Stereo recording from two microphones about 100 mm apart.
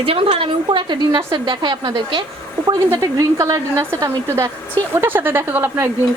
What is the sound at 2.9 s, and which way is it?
A woman's voice, 30° right (ahead or behind).